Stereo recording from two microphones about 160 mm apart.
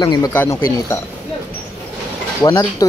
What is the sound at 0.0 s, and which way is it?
Speech, 25° left (ahead or behind).